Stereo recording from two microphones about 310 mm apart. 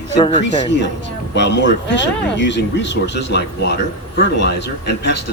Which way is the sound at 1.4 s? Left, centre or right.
Left.